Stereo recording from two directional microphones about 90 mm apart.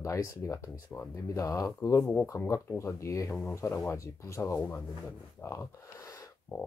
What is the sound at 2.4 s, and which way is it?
Speech, 35° left (ahead or behind).